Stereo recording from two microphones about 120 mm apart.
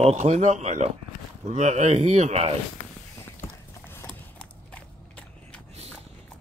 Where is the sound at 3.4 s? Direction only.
20° left (ahead or behind).